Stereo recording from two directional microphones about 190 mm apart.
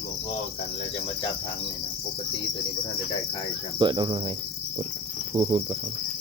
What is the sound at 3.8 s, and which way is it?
Cricket, 25° right (ahead or behind).